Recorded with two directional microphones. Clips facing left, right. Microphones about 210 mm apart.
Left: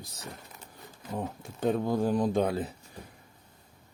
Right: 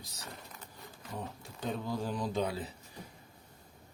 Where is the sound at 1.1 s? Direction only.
50° left (ahead or behind).